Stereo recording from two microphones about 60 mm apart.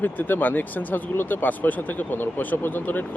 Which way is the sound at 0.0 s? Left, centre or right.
Left.